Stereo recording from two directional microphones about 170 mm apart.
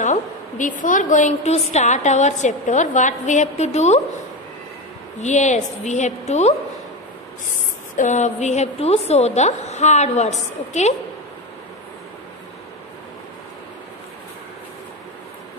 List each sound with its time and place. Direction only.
0.0 s a woman's voice: 50° left (ahead or behind)
5.2 s a woman's voice: 45° left (ahead or behind)
7.9 s a woman's voice: 45° left (ahead or behind)